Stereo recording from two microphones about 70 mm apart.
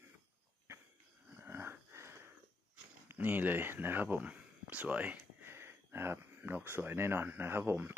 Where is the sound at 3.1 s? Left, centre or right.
Right.